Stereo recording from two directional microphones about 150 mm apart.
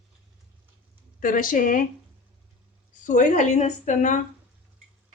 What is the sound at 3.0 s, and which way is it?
A woman's voice, 60° left (ahead or behind).